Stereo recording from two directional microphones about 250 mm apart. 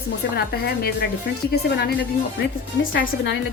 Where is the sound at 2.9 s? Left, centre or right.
Left.